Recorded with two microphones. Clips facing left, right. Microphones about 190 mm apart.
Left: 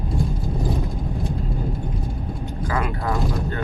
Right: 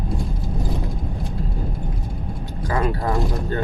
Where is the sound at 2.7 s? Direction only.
30° right (ahead or behind).